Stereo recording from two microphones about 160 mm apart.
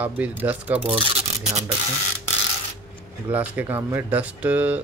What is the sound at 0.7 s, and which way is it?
Speech, 35° right (ahead or behind).